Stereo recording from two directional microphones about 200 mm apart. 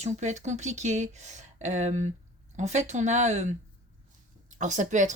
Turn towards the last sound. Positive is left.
turn(degrees=-40)  # may be behind; listen again after turning